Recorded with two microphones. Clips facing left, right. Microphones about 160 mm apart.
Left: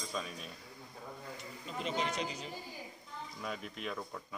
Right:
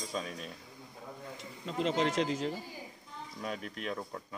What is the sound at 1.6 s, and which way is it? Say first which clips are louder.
Speech: right 6 dB; 90° right.